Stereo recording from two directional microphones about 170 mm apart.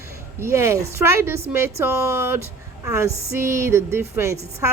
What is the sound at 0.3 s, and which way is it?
A woman's voice, 15° right (ahead or behind).